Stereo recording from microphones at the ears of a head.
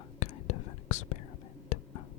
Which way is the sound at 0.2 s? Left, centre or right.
Left.